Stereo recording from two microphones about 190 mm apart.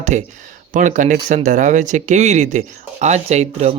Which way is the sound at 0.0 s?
40° right (ahead or behind).